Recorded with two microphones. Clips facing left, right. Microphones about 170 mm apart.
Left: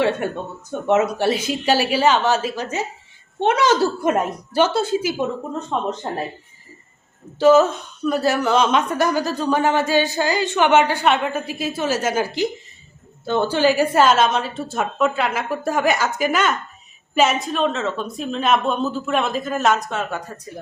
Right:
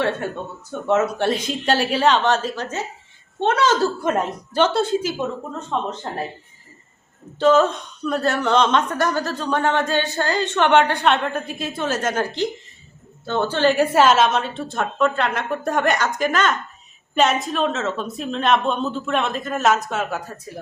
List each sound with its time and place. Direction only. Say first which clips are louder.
0.2 s a woman's voice: left 2 dB; 15° left (ahead or behind)
1.2 s a woman's voice: left 1 dB; 5° left (ahead or behind)
7.3 s a woman's voice: left 2 dB; 5° left (ahead or behind)